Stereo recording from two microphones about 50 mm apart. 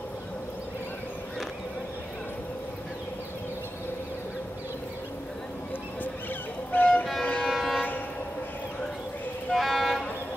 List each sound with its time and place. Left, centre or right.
6.7 s music: left
7.4 s train: centre
9.5 s vehicle: centre